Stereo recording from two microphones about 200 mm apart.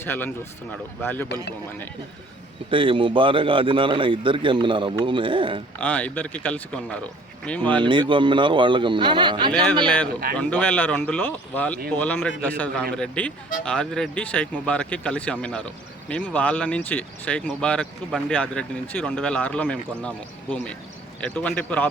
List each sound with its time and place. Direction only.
0.0 s speech: 10° left (ahead or behind)
2.6 s a man's voice: 25° right (ahead or behind)
5.8 s speech: 10° left (ahead or behind)
7.8 s a man's voice: 25° right (ahead or behind)
10.3 s speech: 10° left (ahead or behind)